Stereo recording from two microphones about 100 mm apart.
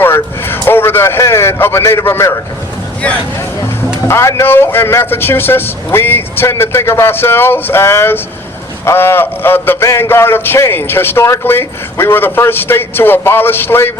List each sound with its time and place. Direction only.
0.0 s speech: 20° left (ahead or behind)
4.1 s a man's voice: 30° left (ahead or behind)